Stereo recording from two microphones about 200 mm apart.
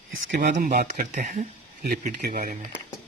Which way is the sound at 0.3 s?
40° right (ahead or behind).